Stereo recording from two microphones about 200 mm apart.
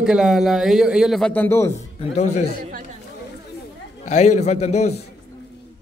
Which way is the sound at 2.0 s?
35° left (ahead or behind).